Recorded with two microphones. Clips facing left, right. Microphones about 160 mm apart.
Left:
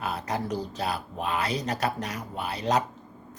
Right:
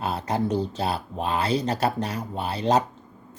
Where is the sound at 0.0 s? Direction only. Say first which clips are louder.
Right 5 dB; 30° right (ahead or behind).